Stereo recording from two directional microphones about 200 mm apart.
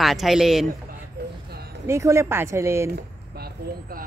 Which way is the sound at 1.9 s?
15° right (ahead or behind).